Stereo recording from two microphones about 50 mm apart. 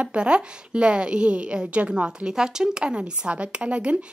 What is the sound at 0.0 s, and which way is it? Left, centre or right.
A woman's voice, right.